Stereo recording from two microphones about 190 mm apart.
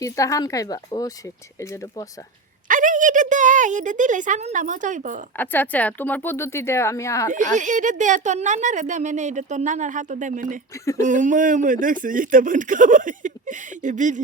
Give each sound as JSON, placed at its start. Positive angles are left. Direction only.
{"t": 0.0, "sound": "speech", "side_deg": 15}
{"t": 2.6, "sound": "speech", "side_deg": -45}
{"t": 5.4, "sound": "speech", "side_deg": 10}
{"t": 7.3, "sound": "speech", "side_deg": -40}